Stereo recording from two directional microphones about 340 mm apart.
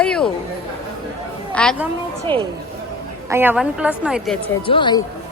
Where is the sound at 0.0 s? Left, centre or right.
Centre.